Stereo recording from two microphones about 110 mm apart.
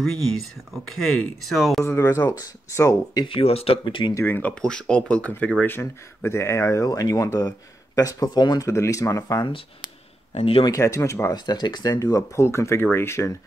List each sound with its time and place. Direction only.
0.0 s speech: centre (ahead or behind)
1.4 s speech: centre (ahead or behind)
1.9 s speech: 25° left (ahead or behind)
3.3 s speech: 60° left (ahead or behind)
3.8 s speech: 45° left (ahead or behind)
4.1 s speech: 20° left (ahead or behind)
10.3 s speech: 60° left (ahead or behind)
10.6 s speech: 30° left (ahead or behind)
11.3 s speech: 40° left (ahead or behind); by 13.3 s 25° left (ahead or behind)